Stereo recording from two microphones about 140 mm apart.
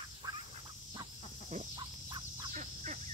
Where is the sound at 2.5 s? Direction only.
60° right (ahead or behind).